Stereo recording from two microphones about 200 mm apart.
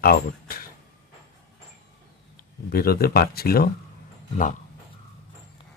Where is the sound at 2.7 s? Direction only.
50° left (ahead or behind).